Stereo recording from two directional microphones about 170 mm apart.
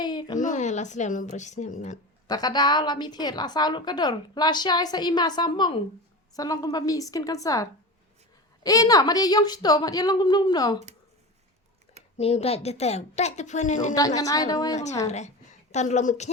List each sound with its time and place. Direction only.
0.0 s a sound: 25° left (ahead or behind)
0.3 s a woman's voice: 45° left (ahead or behind)
2.2 s a woman's voice: 25° left (ahead or behind)
12.1 s a woman's voice: 35° left (ahead or behind)
14.2 s a woman's voice: 20° left (ahead or behind)
15.0 s a woman's voice: 40° left (ahead or behind)